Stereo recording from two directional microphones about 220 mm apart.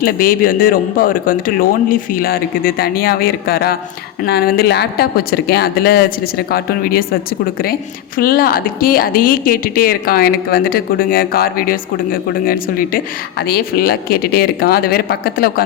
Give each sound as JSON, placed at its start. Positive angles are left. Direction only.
{"t": 0.0, "sound": "speech", "side_deg": 40}